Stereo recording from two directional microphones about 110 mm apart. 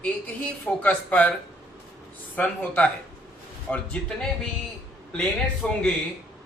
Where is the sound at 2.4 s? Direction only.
15° left (ahead or behind).